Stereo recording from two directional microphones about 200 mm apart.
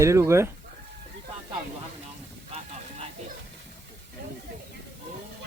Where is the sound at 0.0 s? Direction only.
15° right (ahead or behind).